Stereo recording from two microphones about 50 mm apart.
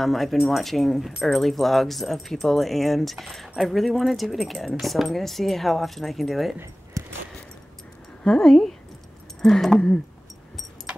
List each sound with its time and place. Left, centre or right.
0.0 s speech: centre
7.0 s a sound: right
8.2 s speech: centre